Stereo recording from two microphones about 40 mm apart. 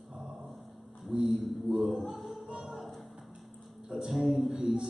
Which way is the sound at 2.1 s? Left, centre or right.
Centre.